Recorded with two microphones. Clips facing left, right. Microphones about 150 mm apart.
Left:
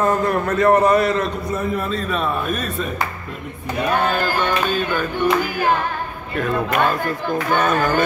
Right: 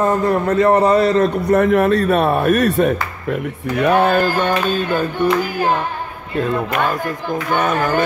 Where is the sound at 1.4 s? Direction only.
75° right (ahead or behind).